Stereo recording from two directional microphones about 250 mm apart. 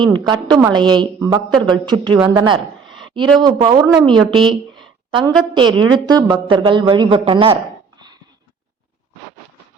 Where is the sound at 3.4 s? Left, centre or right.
Centre.